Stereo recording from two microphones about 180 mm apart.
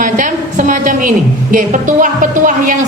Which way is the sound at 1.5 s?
45° right (ahead or behind).